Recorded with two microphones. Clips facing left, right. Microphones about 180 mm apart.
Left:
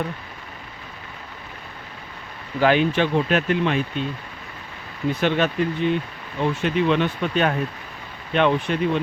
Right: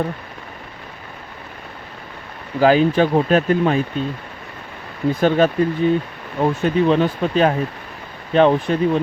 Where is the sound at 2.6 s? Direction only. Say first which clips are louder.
Right 4 dB; 35° right (ahead or behind).